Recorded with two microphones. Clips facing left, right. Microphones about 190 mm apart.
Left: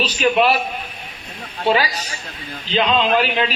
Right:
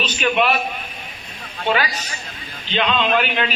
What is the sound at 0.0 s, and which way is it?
Speech, 35° left (ahead or behind).